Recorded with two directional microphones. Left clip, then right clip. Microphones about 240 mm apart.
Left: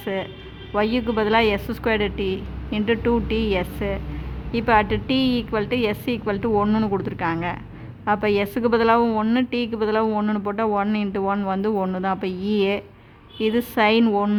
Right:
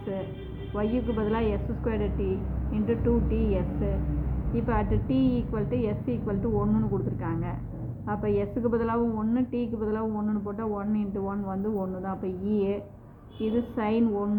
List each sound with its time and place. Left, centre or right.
0.8 s a woman's voice: left